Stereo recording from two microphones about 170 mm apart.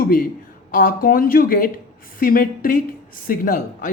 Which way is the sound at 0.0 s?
55° left (ahead or behind).